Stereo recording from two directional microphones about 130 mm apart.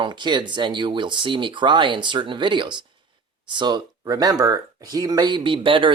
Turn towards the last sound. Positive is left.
turn(degrees=-40)  # may be behind; listen again after turning